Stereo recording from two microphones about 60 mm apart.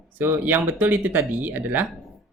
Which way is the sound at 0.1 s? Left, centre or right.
Right.